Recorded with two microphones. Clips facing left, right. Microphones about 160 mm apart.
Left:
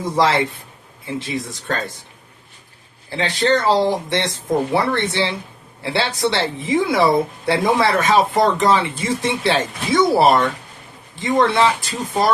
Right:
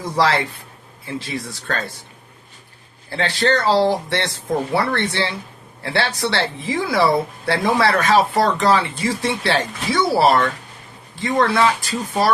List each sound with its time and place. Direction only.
0.2 s speech: 20° left (ahead or behind)
3.1 s speech: 15° left (ahead or behind)